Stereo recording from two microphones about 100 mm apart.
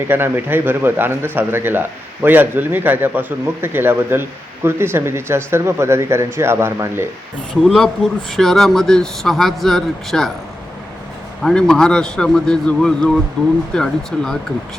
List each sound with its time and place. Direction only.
0.1 s a man's voice: 20° right (ahead or behind)
7.6 s speech: 5° left (ahead or behind)
11.4 s a man's voice: 5° left (ahead or behind)